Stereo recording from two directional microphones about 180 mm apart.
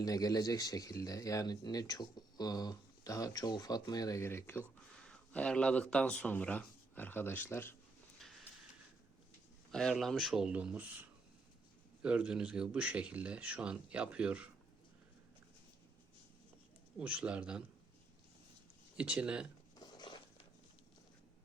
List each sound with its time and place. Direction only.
0.0 s speech: 20° left (ahead or behind)
8.2 s a sound: centre (ahead or behind)
9.7 s speech: centre (ahead or behind)
12.0 s speech: 5° right (ahead or behind)
17.0 s speech: 5° right (ahead or behind)
18.9 s speech: 5° right (ahead or behind)
19.8 s a sound: 25° left (ahead or behind)